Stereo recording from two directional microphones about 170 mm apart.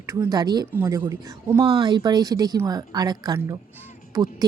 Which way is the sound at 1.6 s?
30° right (ahead or behind).